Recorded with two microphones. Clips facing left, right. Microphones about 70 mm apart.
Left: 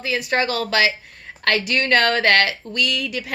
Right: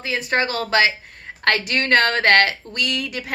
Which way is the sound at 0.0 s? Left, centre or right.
Right.